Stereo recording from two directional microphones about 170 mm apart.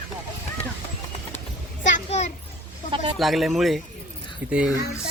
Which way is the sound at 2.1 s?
45° left (ahead or behind).